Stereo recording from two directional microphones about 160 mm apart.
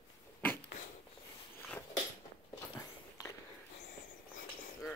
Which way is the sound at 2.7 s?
25° left (ahead or behind).